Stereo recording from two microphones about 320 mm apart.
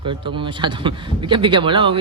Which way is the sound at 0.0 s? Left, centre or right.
Centre.